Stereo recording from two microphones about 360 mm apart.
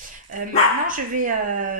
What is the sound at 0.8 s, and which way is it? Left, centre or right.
Speech, right.